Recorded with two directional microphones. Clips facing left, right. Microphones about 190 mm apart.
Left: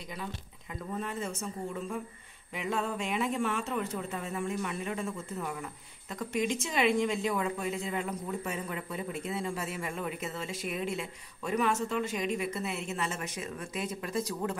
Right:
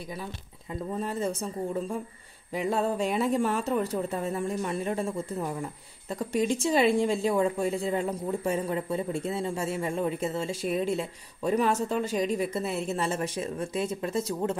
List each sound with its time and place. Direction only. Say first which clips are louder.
0.1 s speech: right 2 dB; 30° right (ahead or behind)